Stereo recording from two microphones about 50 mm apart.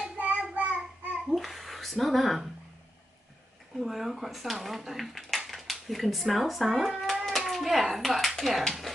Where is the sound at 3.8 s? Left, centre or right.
Centre.